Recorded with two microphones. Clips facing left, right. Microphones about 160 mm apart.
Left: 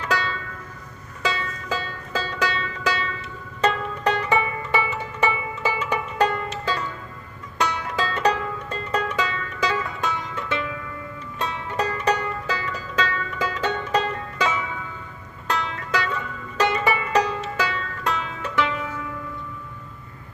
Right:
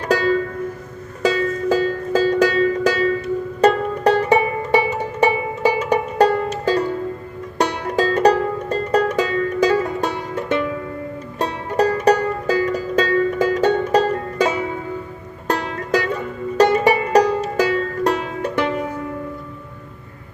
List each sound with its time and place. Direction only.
0.0 s music: 45° right (ahead or behind)